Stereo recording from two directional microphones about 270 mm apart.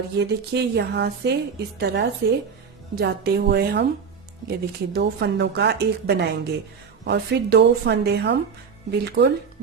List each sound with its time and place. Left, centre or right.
0.2 s speech: right